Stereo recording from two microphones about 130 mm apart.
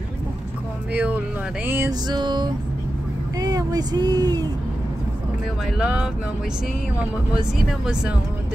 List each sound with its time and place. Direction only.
0.9 s speech: 15° right (ahead or behind)
1.9 s music: 35° right (ahead or behind)
3.3 s speech: 30° right (ahead or behind)
5.8 s speech: 10° right (ahead or behind)
7.3 s speech: 5° right (ahead or behind)